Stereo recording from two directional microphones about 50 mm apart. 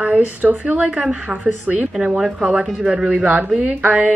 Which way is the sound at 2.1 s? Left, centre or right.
Centre.